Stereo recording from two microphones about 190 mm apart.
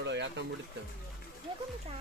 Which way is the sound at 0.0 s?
65° right (ahead or behind).